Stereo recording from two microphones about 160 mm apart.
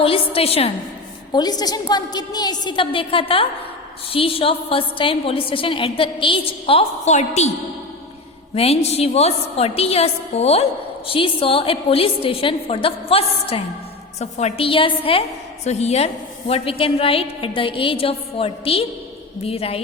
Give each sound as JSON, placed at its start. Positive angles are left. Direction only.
{"t": 0.0, "sound": "a woman's voice", "side_deg": 35}
{"t": 1.3, "sound": "a woman's voice", "side_deg": 25}
{"t": 8.5, "sound": "a woman's voice", "side_deg": 40}